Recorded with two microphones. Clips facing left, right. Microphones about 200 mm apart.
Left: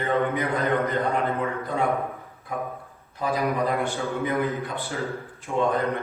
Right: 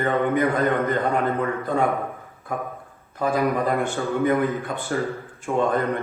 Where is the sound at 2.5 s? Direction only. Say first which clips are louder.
Right 2 dB; 50° right (ahead or behind).